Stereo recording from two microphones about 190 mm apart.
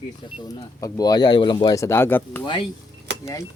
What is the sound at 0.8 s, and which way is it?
Speech, 20° left (ahead or behind).